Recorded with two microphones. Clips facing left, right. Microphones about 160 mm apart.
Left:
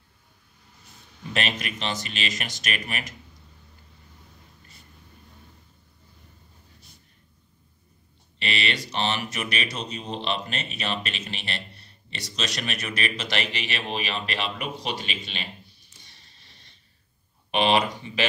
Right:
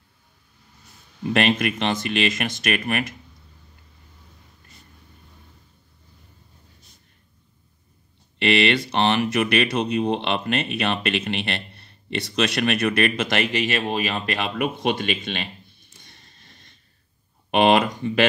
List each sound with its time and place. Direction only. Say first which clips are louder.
1.3 s speech: right 9 dB; 55° right (ahead or behind)
8.4 s speech: right 10 dB; 60° right (ahead or behind)
16.0 s a sound: right 5 dB; 50° right (ahead or behind)
17.5 s speech: right 5 dB; 50° right (ahead or behind)